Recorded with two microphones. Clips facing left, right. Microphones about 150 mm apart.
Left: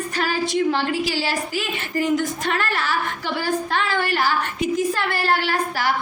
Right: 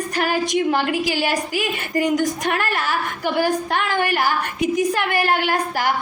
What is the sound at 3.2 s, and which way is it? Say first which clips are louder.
Speech: right 7 dB; 15° right (ahead or behind).